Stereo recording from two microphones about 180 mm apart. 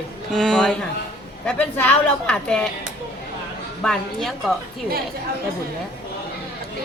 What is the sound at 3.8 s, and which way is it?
Speech, centre (ahead or behind).